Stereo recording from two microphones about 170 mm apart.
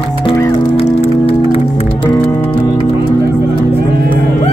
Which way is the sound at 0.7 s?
35° left (ahead or behind).